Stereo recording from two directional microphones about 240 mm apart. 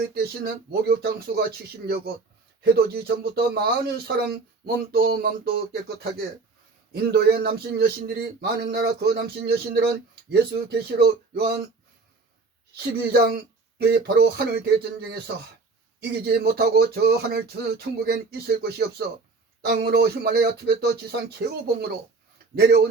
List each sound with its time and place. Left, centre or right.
0.1 s speech: right
12.7 s speech: right
16.2 s speech: right